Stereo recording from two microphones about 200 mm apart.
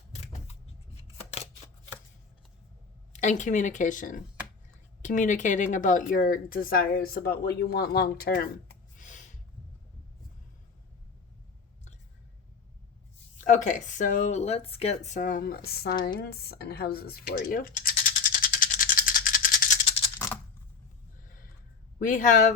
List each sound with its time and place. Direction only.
3.1 s speech: 35° left (ahead or behind)
13.4 s speech: 40° left (ahead or behind)
16.1 s computer keyboard: 50° left (ahead or behind)
20.1 s typing: 10° left (ahead or behind)
21.9 s speech: 40° left (ahead or behind)